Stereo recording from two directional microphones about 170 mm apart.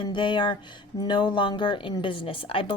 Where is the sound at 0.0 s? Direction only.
30° left (ahead or behind).